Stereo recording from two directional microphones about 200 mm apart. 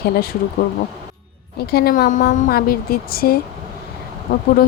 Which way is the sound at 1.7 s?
50° left (ahead or behind).